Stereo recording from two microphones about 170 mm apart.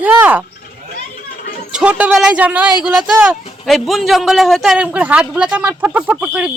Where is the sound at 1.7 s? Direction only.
5° right (ahead or behind).